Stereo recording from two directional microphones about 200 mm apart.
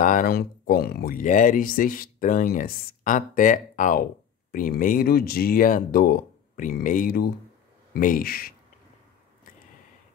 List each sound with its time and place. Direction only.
0.0 s speech: 40° left (ahead or behind)